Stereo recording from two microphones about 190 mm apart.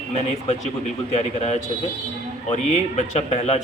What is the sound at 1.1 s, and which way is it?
A man's voice, 35° left (ahead or behind).